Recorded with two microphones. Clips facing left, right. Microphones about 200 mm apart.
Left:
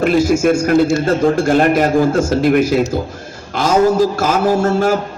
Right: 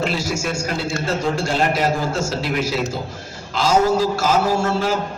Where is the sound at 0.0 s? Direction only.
50° left (ahead or behind).